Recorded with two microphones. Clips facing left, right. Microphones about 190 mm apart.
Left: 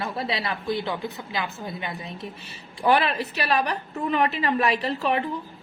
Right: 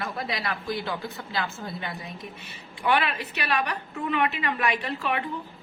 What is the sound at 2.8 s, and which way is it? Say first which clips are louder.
A woman's voice: left 4 dB; 35° left (ahead or behind).